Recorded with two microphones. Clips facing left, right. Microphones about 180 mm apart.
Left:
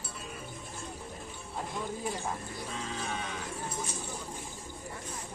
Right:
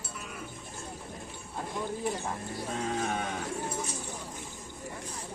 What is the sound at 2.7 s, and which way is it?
Livestock, 55° right (ahead or behind).